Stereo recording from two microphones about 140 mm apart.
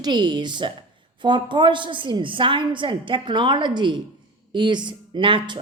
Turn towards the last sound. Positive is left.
turn(degrees=-35)  # may be behind; listen again after turning